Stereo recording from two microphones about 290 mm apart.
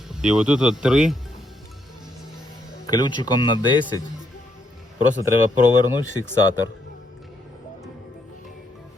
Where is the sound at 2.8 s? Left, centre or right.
Centre.